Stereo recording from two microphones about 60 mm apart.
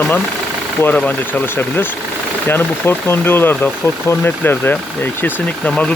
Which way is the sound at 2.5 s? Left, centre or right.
Left.